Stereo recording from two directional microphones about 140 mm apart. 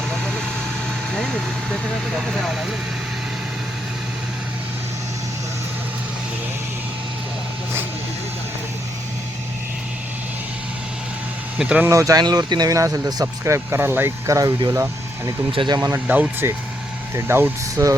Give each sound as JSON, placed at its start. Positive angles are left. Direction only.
{"t": 0.1, "sound": "vehicle", "side_deg": 5}
{"t": 1.1, "sound": "speech", "side_deg": 5}
{"t": 11.5, "sound": "speech", "side_deg": -5}
{"t": 11.9, "sound": "speech", "side_deg": -25}
{"t": 16.0, "sound": "speech", "side_deg": -10}